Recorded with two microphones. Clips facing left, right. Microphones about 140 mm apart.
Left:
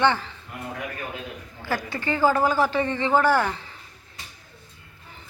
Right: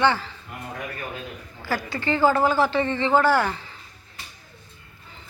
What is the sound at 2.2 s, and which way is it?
Speech, 10° left (ahead or behind).